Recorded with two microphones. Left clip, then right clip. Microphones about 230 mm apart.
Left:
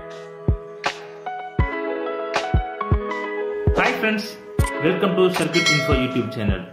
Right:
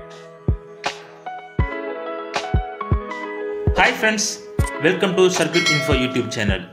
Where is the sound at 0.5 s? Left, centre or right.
Centre.